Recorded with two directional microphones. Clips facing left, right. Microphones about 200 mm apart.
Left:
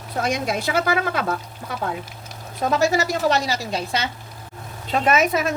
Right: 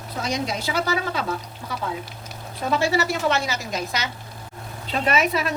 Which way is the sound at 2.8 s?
40° left (ahead or behind).